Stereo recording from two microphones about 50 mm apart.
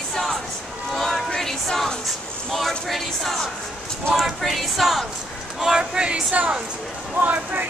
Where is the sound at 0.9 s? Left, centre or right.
Centre.